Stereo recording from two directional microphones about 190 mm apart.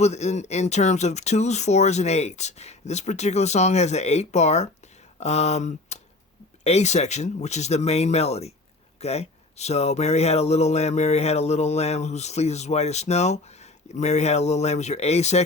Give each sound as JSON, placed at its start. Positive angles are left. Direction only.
{"t": 0.0, "sound": "speech", "side_deg": 35}